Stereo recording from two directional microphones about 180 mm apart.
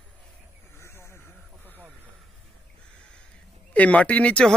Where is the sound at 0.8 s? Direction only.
15° left (ahead or behind).